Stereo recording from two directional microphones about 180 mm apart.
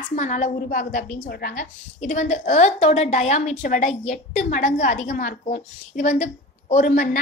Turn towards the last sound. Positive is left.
turn(degrees=50)  # may be behind; listen again after turning